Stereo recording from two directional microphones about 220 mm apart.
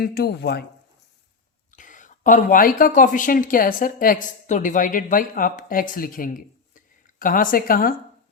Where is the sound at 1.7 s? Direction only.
35° left (ahead or behind).